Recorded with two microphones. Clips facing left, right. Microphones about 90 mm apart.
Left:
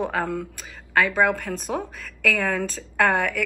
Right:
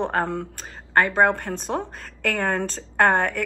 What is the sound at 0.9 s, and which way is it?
Speech, 35° right (ahead or behind).